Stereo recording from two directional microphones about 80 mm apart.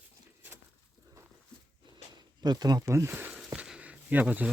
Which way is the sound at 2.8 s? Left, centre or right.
Right.